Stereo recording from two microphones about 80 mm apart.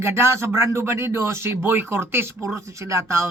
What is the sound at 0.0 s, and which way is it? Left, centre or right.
Speech, right.